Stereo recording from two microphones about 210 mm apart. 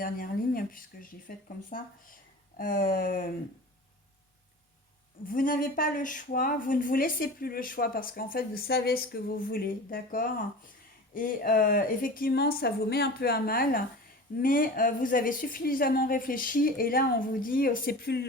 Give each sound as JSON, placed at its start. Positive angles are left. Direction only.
{"t": 0.0, "sound": "a woman's voice", "side_deg": 40}
{"t": 2.6, "sound": "a woman's voice", "side_deg": 40}
{"t": 5.3, "sound": "a woman's voice", "side_deg": 40}